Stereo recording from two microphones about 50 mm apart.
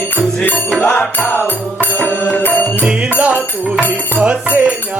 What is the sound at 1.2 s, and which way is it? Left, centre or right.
Music, left.